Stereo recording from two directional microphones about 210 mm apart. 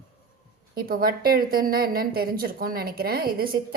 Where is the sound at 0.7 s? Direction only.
45° right (ahead or behind).